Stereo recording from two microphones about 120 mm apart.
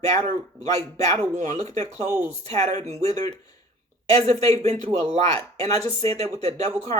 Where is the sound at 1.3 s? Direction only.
90° right.